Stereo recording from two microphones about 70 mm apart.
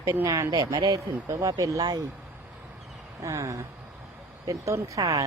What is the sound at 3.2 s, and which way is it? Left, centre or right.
Speech, right.